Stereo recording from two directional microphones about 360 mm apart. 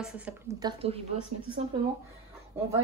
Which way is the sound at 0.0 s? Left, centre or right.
Centre.